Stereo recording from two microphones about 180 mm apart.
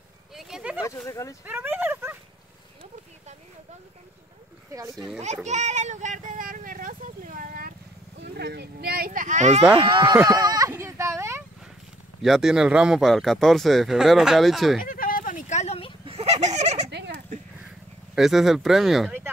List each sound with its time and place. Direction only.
0.3 s a sound: centre (ahead or behind)
0.8 s speech: 15° left (ahead or behind)
1.4 s speech: 10° right (ahead or behind)
4.9 s speech: 5° right (ahead or behind)
5.2 s vehicle: 40° right (ahead or behind)
8.2 s speech: 65° right (ahead or behind); by 9.6 s 40° right (ahead or behind)
9.8 s speech: 25° right (ahead or behind)
10.2 s sheep: 20° right (ahead or behind)
12.2 s speech: centre (ahead or behind)
14.8 s a sound: 50° left (ahead or behind); by 15.9 s 35° left (ahead or behind)
16.1 s goat: 35° right (ahead or behind)
18.1 s speech: centre (ahead or behind)